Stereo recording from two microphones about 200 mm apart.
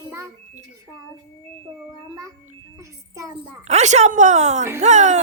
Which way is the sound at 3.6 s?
35° right (ahead or behind).